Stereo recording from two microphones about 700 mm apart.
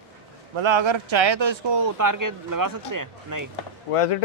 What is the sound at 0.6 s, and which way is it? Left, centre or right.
Speech, right.